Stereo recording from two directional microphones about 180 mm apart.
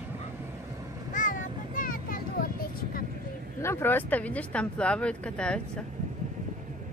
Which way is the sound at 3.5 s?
15° left (ahead or behind).